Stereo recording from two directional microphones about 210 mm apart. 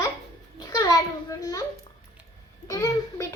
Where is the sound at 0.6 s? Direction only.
20° left (ahead or behind).